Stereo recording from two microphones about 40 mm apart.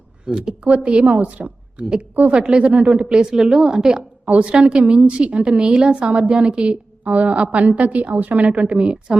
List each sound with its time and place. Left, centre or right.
0.3 s a woman's voice: right
2.3 s speech: right
3.2 s a woman's voice: centre
4.3 s a woman's voice: right